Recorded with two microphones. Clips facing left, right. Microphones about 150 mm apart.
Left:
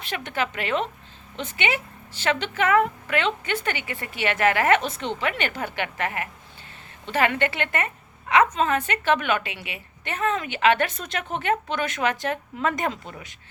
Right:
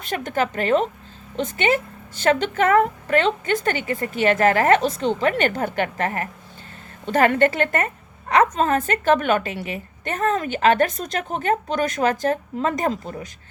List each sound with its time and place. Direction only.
0.0 s a woman's voice: 45° right (ahead or behind)